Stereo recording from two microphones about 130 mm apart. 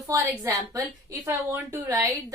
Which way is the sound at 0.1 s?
25° right (ahead or behind).